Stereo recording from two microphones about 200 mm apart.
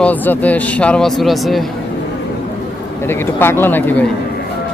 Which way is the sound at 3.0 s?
10° left (ahead or behind).